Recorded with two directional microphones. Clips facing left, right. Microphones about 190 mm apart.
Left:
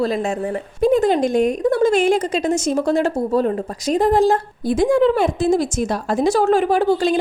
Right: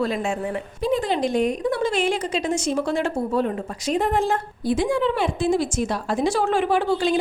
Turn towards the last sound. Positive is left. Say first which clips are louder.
# left 4 dB
turn(degrees=40)  # may be behind; listen again after turning